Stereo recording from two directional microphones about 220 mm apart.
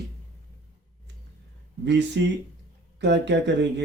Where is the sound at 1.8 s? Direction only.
50° right (ahead or behind).